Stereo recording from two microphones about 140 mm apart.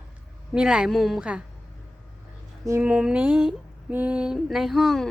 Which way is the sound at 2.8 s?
10° right (ahead or behind).